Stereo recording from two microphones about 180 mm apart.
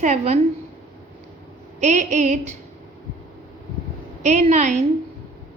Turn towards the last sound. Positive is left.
turn(degrees=-40)  # may be behind; listen again after turning